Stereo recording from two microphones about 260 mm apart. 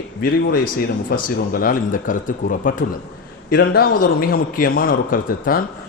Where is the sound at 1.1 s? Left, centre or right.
Left.